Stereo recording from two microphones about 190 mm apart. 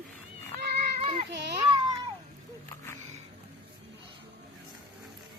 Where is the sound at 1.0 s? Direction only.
30° right (ahead or behind).